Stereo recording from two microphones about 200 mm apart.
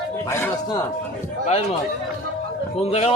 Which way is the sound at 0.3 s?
15° left (ahead or behind).